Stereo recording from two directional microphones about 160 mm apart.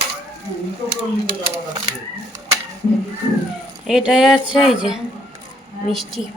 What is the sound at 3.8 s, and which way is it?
Speech, 5° right (ahead or behind).